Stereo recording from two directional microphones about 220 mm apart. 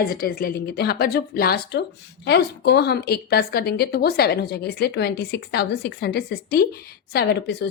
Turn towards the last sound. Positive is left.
turn(degrees=50)  # may be behind; listen again after turning